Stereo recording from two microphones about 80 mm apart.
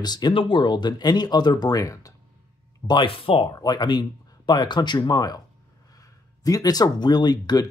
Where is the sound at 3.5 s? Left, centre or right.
Left.